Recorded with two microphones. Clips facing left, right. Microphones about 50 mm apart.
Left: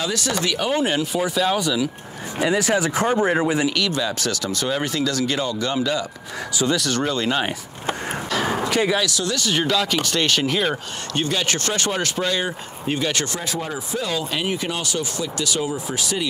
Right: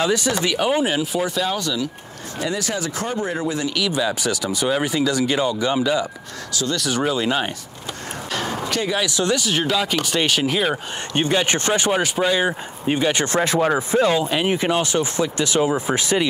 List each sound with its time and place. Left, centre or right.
0.0 s speech: centre
2.3 s speech: left
3.7 s speech: centre
6.5 s speech: centre
6.8 s speech: centre
8.5 s a sound: centre
9.0 s speech: right
9.3 s speech: centre
11.1 s speech: right
13.3 s speech: right
14.1 s speech: centre